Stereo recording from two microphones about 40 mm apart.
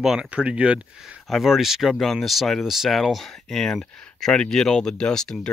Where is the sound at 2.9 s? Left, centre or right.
Centre.